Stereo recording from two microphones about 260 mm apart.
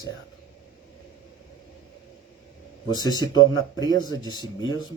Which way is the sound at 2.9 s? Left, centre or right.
Centre.